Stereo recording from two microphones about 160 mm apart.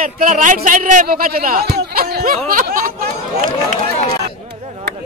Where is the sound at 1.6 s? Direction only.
80° right.